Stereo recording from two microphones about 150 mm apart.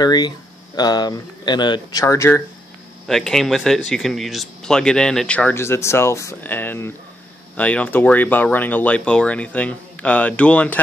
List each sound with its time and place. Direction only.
0.0 s speech: 25° left (ahead or behind)
3.1 s speech: centre (ahead or behind)